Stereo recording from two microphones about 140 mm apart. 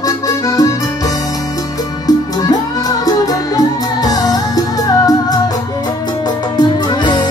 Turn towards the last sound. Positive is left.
turn(degrees=30)  # may be behind; listen again after turning